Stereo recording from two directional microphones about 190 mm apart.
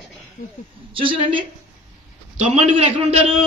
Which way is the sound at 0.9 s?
25° right (ahead or behind).